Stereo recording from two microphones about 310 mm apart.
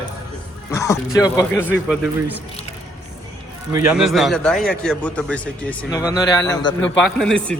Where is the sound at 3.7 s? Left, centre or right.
Centre.